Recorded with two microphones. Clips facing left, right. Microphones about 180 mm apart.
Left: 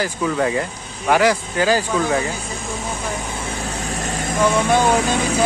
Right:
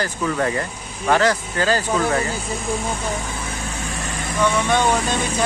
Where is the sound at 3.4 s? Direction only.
35° left (ahead or behind).